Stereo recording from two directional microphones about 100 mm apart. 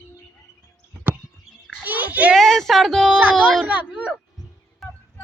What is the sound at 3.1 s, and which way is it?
Speech, 15° right (ahead or behind).